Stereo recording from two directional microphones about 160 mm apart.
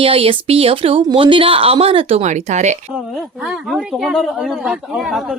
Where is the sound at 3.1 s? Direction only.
Centre (ahead or behind).